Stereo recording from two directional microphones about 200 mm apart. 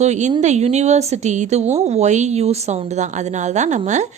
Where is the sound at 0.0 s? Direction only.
35° right (ahead or behind).